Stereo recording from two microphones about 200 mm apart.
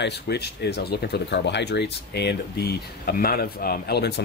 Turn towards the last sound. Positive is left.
turn(degrees=50)  # may be behind; listen again after turning